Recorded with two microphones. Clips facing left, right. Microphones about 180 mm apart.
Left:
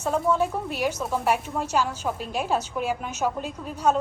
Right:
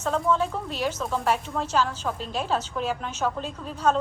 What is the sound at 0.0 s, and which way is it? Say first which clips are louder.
A woman's voice: left 1 dB; 10° left (ahead or behind).